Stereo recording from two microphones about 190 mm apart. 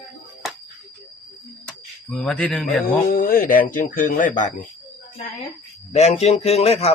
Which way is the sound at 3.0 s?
50° left (ahead or behind).